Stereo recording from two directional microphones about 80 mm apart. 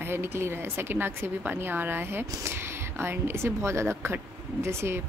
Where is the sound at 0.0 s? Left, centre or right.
Right.